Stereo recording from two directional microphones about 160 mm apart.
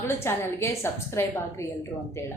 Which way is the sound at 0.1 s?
15° left (ahead or behind).